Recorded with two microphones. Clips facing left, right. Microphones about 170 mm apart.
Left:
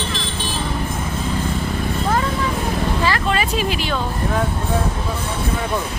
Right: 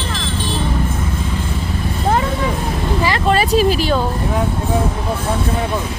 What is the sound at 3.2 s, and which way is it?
Speech, 35° right (ahead or behind).